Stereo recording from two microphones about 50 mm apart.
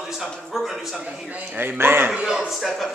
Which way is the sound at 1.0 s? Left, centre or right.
Right.